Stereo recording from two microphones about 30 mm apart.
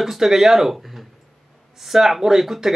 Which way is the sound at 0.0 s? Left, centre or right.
Centre.